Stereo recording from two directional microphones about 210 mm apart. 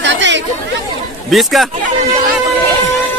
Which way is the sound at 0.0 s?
60° right (ahead or behind).